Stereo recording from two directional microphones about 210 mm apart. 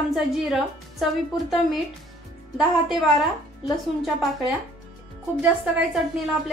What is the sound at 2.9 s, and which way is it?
Speech, centre (ahead or behind).